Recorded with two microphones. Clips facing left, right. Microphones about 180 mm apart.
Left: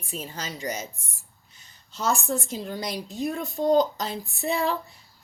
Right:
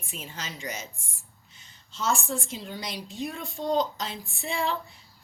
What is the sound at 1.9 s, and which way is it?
A woman's voice, 40° left (ahead or behind).